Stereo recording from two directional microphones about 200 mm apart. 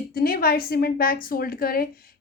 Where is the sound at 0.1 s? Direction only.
50° left (ahead or behind).